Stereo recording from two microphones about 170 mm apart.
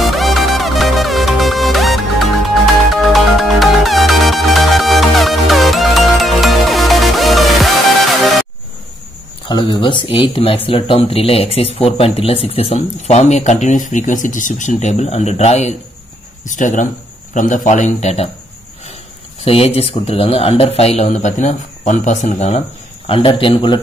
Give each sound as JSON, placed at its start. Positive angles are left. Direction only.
{"t": 0.0, "sound": "music", "side_deg": 0}
{"t": 9.5, "sound": "a man's voice", "side_deg": 30}
{"t": 19.4, "sound": "speech", "side_deg": 35}
{"t": 23.0, "sound": "speech", "side_deg": 30}